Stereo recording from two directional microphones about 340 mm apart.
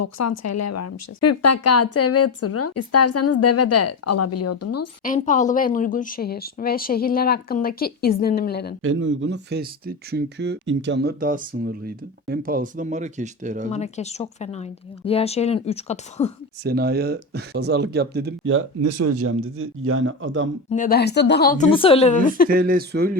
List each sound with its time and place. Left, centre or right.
0.0 s speech: left
5.0 s speech: left
8.8 s speech: right
13.7 s speech: centre
16.6 s speech: right
20.7 s speech: left
22.4 s speech: right